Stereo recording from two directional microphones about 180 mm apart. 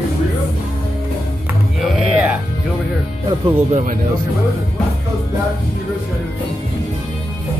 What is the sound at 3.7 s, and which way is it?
Speech, 50° right (ahead or behind).